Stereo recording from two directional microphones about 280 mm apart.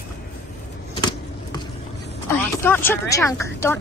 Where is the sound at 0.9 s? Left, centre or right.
Centre.